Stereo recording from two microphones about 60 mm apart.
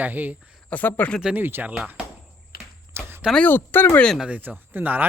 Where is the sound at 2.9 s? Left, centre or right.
Right.